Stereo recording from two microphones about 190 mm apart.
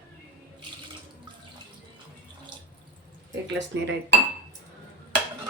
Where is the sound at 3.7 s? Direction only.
70° right (ahead or behind).